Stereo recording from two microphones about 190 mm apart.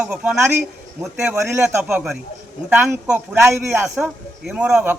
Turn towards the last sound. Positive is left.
turn(degrees=-5)  # may be behind; listen again after turning